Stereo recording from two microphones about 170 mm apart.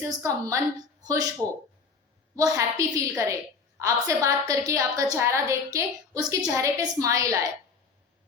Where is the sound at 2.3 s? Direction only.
20° right (ahead or behind).